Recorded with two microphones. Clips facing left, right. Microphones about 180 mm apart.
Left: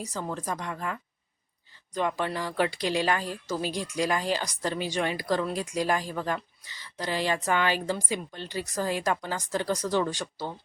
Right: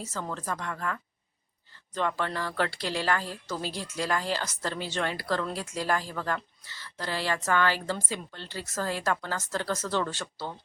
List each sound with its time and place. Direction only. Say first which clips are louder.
0.0 s speech: left 2 dB; 15° left (ahead or behind)
2.0 s speech: left 1 dB; 15° left (ahead or behind)